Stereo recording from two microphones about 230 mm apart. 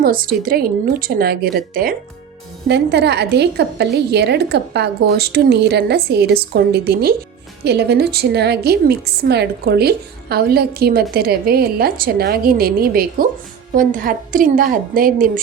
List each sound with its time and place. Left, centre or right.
0.0 s a woman's voice: right